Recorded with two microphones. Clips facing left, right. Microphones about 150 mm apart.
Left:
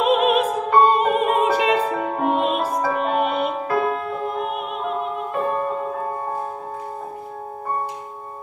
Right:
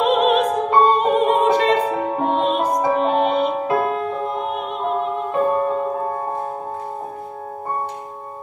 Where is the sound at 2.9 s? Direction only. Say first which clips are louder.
Right 4 dB; 30° right (ahead or behind).